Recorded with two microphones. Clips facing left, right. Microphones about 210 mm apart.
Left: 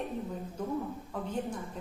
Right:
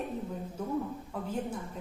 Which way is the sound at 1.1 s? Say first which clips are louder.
Even; 5° right (ahead or behind).